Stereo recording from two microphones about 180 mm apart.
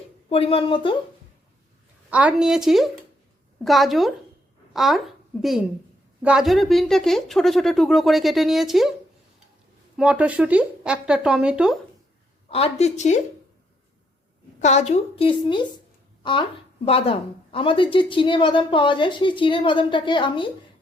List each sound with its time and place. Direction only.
0.3 s a woman's voice: 30° left (ahead or behind)
2.0 s speech: 10° right (ahead or behind)
10.0 s speech: 5° right (ahead or behind)
12.5 s a woman's voice: 35° left (ahead or behind)
14.6 s a woman's voice: 40° left (ahead or behind)
16.8 s a woman's voice: 30° left (ahead or behind)